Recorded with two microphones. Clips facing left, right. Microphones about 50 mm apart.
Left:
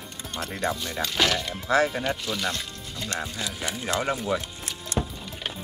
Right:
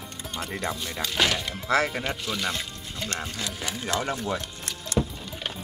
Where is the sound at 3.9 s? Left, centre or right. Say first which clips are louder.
Left 2 dB; centre.